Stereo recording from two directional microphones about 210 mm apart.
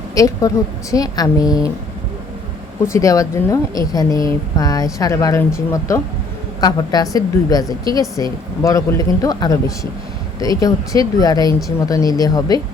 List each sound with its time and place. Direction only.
0.1 s a woman's voice: 15° left (ahead or behind)
2.8 s a woman's voice: 15° left (ahead or behind)